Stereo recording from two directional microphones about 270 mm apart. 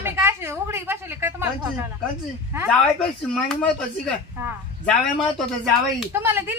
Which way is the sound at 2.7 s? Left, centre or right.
Centre.